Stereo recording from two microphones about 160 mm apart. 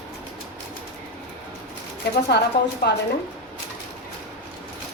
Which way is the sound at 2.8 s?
90° left.